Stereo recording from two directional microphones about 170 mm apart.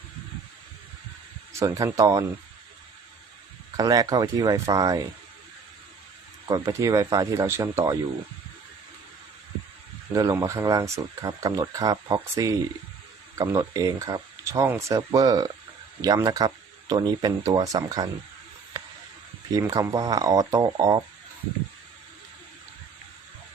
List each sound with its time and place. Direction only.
1.5 s speech: 20° right (ahead or behind)
3.8 s speech: 20° right (ahead or behind)
6.5 s speech: 20° right (ahead or behind)
10.1 s speech: 20° right (ahead or behind)
19.5 s speech: 20° right (ahead or behind)